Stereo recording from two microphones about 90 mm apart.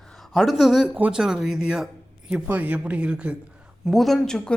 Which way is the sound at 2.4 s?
15° right (ahead or behind).